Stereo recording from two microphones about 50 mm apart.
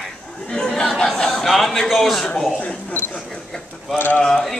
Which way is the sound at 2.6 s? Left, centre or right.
Left.